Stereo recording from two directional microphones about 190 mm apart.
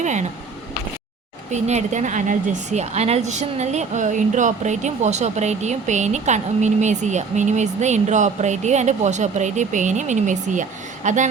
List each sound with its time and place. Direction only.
0.0 s speech: 40° right (ahead or behind)
1.5 s speech: 35° right (ahead or behind)